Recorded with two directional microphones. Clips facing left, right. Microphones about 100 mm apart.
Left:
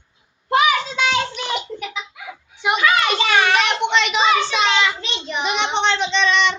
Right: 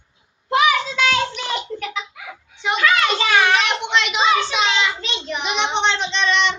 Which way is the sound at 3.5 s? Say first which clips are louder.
Left 2 dB; centre (ahead or behind).